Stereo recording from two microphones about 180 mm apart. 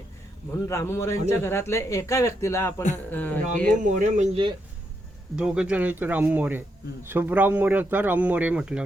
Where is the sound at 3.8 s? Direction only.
45° right (ahead or behind).